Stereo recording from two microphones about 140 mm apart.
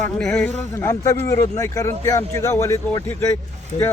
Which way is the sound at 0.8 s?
20° left (ahead or behind).